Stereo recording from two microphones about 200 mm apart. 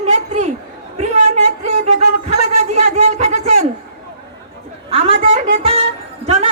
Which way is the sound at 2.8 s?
35° right (ahead or behind).